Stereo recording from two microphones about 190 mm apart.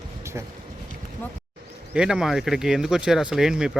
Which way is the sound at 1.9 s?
5° right (ahead or behind).